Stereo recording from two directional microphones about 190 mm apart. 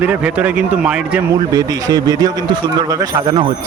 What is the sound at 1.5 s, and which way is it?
Speech, 20° right (ahead or behind).